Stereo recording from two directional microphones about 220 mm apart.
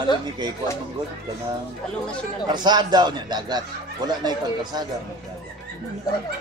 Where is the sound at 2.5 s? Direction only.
20° right (ahead or behind).